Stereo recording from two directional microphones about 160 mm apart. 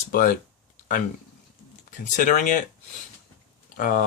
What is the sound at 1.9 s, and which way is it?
Speech, 50° left (ahead or behind).